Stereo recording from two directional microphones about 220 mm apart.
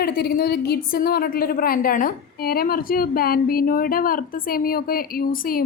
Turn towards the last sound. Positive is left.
turn(degrees=40)  # may be behind; listen again after turning